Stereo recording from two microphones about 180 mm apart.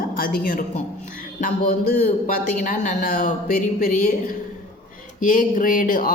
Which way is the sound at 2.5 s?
45° left (ahead or behind).